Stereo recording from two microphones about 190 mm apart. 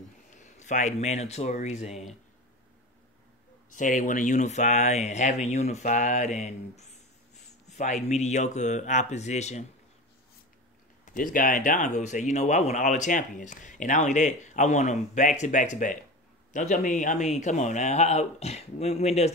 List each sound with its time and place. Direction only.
0.3 s speech: 40° left (ahead or behind)
3.7 s speech: 40° left (ahead or behind)
11.1 s speech: 45° left (ahead or behind)